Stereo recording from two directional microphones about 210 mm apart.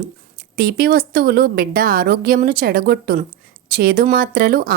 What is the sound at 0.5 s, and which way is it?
A woman's voice, 45° right (ahead or behind).